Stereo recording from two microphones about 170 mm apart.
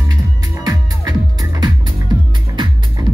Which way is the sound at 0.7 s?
20° right (ahead or behind).